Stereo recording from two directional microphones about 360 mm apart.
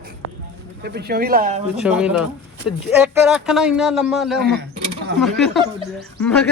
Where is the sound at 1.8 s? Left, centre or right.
Centre.